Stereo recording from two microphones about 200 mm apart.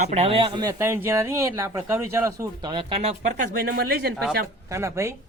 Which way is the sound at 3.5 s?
50° right (ahead or behind).